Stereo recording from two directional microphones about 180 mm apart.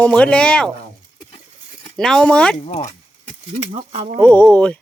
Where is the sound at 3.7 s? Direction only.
35° right (ahead or behind).